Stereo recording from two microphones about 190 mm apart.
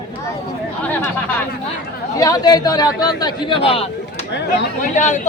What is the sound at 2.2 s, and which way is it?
A man's voice, 20° left (ahead or behind).